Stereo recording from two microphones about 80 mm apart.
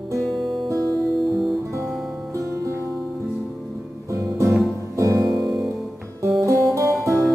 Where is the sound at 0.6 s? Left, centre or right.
Right.